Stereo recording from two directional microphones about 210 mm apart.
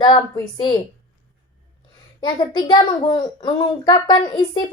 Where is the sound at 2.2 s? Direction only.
20° left (ahead or behind).